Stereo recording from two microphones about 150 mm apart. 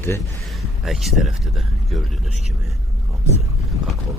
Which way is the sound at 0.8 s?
Centre (ahead or behind).